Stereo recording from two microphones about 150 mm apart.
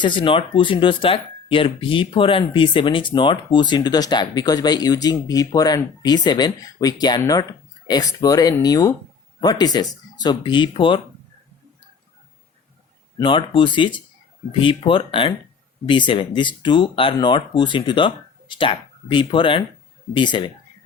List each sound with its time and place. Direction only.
0.0 s speech: 30° left (ahead or behind)
13.1 s speech: 35° left (ahead or behind)